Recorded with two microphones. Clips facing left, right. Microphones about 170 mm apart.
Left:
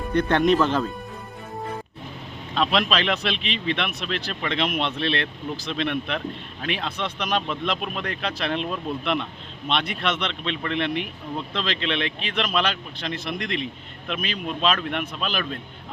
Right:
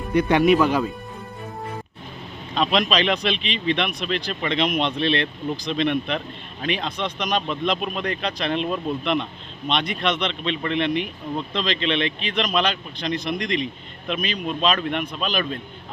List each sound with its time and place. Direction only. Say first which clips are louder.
0.1 s speech: right 3 dB; 10° right (ahead or behind)
2.6 s speech: right 2 dB; centre (ahead or behind)